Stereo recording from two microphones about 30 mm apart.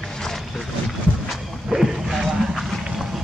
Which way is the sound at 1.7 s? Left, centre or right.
Centre.